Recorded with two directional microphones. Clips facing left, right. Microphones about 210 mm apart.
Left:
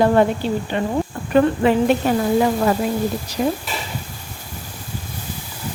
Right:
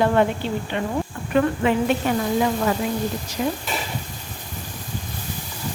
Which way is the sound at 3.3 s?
35° left (ahead or behind).